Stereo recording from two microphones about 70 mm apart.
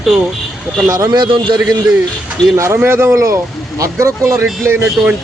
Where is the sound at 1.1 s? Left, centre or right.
Right.